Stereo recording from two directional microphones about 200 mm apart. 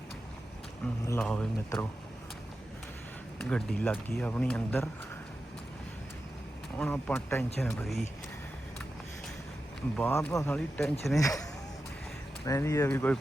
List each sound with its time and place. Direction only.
1.0 s speech: 10° left (ahead or behind)
3.5 s speech: 5° left (ahead or behind)
6.7 s speech: 5° left (ahead or behind)
9.9 s speech: 10° left (ahead or behind)
12.5 s speech: 15° left (ahead or behind)